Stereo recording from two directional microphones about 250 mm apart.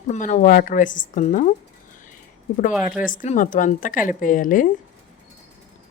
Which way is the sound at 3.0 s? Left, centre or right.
Left.